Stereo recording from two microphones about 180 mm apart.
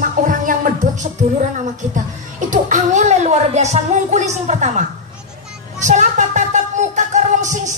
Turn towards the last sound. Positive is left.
turn(degrees=-40)  # may be behind; listen again after turning